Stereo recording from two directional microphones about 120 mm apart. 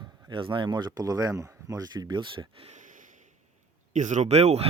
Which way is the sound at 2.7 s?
90° right.